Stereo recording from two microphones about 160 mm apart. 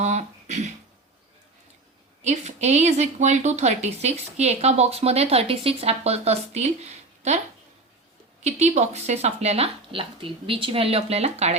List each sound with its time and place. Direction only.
0.0 s a sound: 45° right (ahead or behind)
2.2 s a woman's voice: 45° right (ahead or behind)
8.4 s a woman's voice: 45° right (ahead or behind)